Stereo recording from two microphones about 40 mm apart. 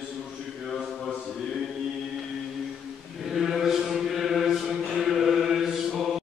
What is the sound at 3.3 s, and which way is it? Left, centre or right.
Chant, centre.